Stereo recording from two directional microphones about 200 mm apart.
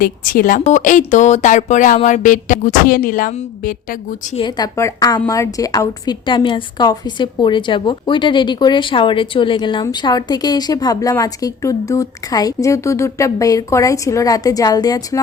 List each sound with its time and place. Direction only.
0.0 s speech: 45° left (ahead or behind)
0.7 s a sound: 40° left (ahead or behind)
4.4 s a woman's voice: 20° left (ahead or behind)